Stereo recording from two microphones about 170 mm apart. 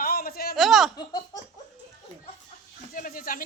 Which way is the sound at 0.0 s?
60° left (ahead or behind).